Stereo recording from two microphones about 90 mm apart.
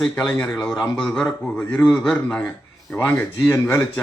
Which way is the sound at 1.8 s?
Centre (ahead or behind).